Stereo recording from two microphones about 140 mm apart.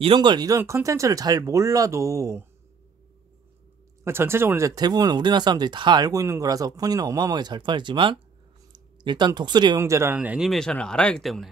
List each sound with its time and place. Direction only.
0.0 s speech: 35° right (ahead or behind)
0.6 s speech: 20° right (ahead or behind)
4.0 s speech: 15° right (ahead or behind)
9.8 s speech: 20° right (ahead or behind)
10.1 s speech: 10° right (ahead or behind)